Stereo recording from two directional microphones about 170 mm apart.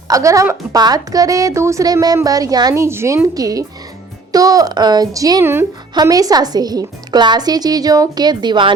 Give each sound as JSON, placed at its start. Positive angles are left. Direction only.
{"t": 0.1, "sound": "a woman's voice", "side_deg": -20}